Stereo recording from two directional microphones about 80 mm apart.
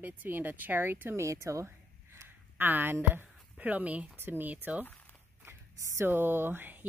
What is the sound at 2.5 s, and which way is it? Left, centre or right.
Speech, right.